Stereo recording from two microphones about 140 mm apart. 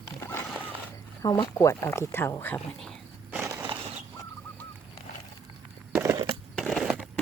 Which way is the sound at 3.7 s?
40° right (ahead or behind).